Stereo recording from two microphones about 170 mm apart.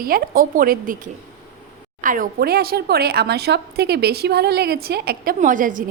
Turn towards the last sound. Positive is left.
turn(degrees=-50)  # may be behind; listen again after turning